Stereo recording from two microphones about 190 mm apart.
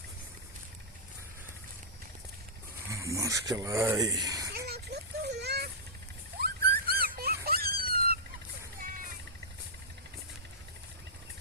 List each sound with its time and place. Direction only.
2.9 s speech: 15° right (ahead or behind)
4.5 s a sound: 55° right (ahead or behind)
7.0 s dog: 50° right (ahead or behind)
7.4 s cat: 55° right (ahead or behind)